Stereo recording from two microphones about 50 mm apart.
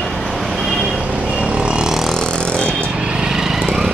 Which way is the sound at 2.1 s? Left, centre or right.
Centre.